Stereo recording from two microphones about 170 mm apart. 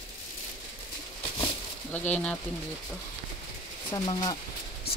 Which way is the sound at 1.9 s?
10° left (ahead or behind).